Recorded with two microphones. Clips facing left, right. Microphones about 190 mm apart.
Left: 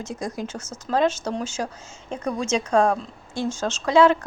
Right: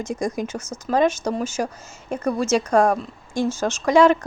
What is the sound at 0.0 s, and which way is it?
Speech, 15° right (ahead or behind).